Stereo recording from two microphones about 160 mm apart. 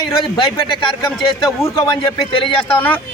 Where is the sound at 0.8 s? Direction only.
30° left (ahead or behind).